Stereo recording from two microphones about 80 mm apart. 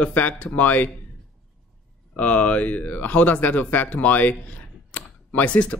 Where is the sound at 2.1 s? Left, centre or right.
Centre.